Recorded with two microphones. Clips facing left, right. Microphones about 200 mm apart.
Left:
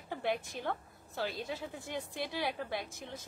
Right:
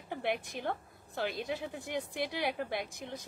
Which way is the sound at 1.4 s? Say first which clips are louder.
Right 3 dB; 15° right (ahead or behind).